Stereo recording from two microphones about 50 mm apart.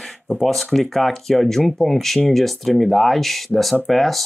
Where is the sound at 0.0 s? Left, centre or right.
Centre.